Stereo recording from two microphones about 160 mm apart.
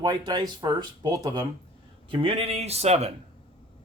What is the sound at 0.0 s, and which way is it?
Speech, 25° right (ahead or behind).